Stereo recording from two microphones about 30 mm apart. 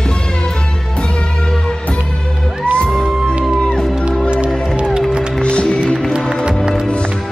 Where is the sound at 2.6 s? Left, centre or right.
Left.